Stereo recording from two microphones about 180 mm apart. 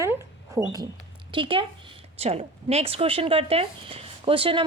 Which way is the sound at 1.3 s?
30° right (ahead or behind).